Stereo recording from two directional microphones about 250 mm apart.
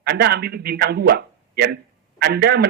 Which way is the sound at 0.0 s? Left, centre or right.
Right.